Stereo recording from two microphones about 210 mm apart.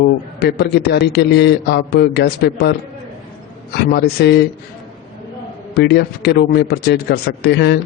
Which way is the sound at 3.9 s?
50° left (ahead or behind).